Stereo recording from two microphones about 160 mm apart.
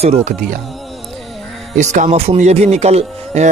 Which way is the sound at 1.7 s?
50° right (ahead or behind).